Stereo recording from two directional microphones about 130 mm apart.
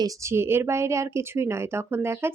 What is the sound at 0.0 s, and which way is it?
A woman's voice, 20° right (ahead or behind).